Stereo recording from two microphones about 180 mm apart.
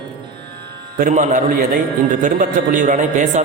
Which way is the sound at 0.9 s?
45° right (ahead or behind).